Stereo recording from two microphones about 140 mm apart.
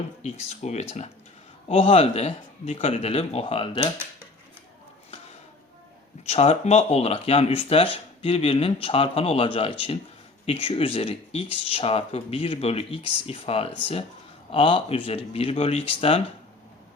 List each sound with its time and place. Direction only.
0.2 s speech: 50° left (ahead or behind)
6.2 s speech: 50° left (ahead or behind)